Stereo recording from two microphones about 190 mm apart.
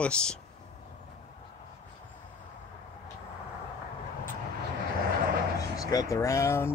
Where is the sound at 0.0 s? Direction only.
5° left (ahead or behind).